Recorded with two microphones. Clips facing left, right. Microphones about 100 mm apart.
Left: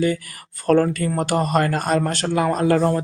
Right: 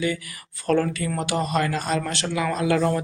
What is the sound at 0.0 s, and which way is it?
A man's voice, 45° left (ahead or behind).